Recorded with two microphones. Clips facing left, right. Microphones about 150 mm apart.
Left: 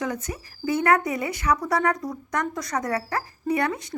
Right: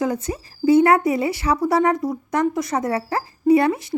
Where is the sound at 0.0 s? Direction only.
30° right (ahead or behind).